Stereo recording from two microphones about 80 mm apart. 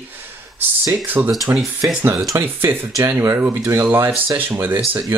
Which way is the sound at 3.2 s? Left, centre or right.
Right.